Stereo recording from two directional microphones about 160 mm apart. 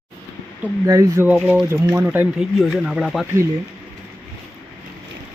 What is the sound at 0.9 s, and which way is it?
Speech, 20° right (ahead or behind).